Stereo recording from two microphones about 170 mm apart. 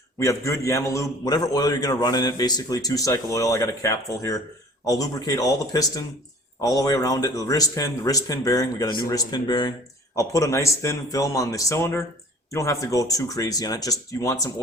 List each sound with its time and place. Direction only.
0.2 s a man's voice: 20° left (ahead or behind)